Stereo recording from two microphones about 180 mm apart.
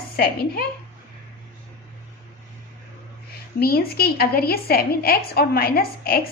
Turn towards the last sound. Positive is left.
turn(degrees=55)  # may be behind; listen again after turning